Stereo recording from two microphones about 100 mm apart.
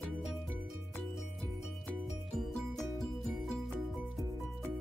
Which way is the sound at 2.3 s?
Centre (ahead or behind).